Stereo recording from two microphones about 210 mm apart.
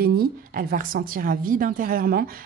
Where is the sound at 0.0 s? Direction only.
45° right (ahead or behind).